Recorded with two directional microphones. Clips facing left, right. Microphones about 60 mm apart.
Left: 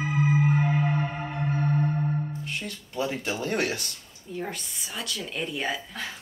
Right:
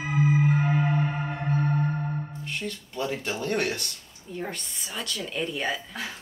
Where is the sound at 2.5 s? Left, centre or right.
Centre.